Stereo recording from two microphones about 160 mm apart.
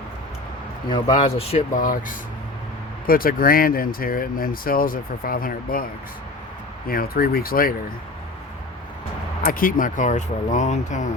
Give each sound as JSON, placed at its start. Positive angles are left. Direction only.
{"t": 0.9, "sound": "speech", "side_deg": 30}
{"t": 1.7, "sound": "speech", "side_deg": 55}
{"t": 9.4, "sound": "speech", "side_deg": 60}